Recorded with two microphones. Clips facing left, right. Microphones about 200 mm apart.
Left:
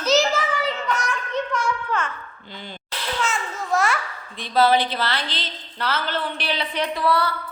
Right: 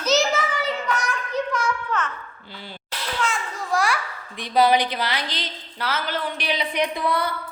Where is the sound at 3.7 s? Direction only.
Centre (ahead or behind).